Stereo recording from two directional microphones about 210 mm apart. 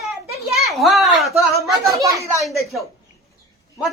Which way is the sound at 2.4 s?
Centre (ahead or behind).